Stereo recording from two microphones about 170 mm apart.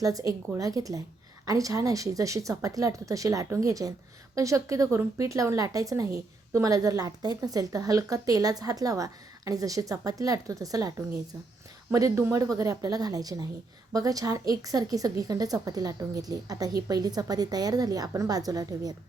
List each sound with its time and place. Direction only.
0.0 s a woman's voice: 20° right (ahead or behind)